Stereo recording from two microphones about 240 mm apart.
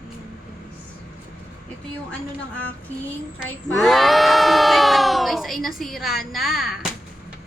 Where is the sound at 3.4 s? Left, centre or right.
Centre.